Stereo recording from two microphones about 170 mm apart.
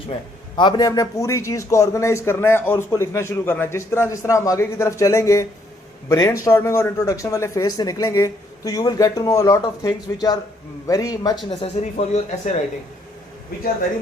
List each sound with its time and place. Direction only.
0.1 s a man's voice: 30° left (ahead or behind)
11.6 s speech: 35° left (ahead or behind)